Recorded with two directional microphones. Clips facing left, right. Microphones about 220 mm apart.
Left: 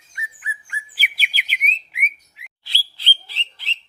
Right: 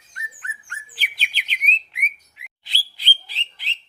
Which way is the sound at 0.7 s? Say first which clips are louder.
Left 4 dB; 5° left (ahead or behind).